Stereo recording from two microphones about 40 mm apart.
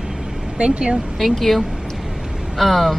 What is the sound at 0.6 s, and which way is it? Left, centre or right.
Speech, right.